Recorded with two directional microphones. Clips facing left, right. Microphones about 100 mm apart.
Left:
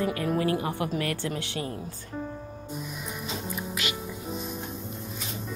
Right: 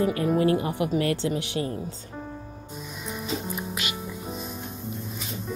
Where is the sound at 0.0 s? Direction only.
30° right (ahead or behind).